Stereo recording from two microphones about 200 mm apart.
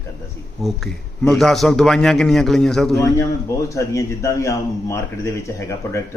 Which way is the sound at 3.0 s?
15° left (ahead or behind).